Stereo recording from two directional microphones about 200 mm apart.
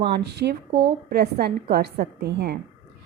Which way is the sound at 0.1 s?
55° right (ahead or behind).